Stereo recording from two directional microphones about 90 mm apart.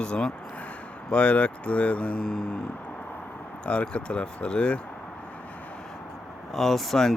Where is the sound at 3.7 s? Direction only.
15° left (ahead or behind).